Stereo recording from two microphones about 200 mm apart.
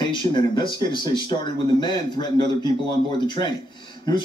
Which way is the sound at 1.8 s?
20° left (ahead or behind).